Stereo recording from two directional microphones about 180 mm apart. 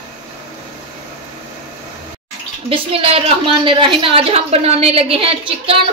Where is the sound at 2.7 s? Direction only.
30° right (ahead or behind).